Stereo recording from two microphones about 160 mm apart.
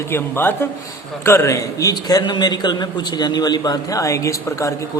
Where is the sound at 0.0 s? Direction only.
15° left (ahead or behind).